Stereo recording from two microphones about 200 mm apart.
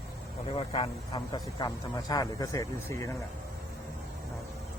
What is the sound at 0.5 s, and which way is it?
Speech, 30° left (ahead or behind).